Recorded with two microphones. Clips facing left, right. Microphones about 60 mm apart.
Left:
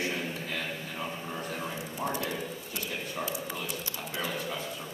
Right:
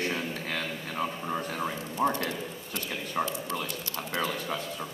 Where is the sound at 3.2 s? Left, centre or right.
Right.